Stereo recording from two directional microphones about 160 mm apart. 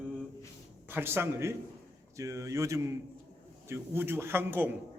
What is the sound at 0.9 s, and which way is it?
A man's voice, 15° right (ahead or behind).